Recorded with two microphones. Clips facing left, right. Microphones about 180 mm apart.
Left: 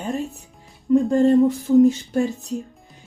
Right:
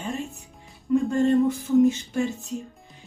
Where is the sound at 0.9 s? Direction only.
35° left (ahead or behind).